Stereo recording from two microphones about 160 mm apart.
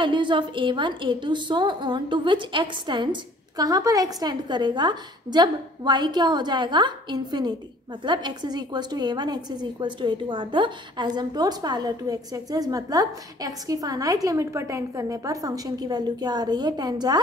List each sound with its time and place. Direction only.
0.0 s a woman's voice: 30° right (ahead or behind)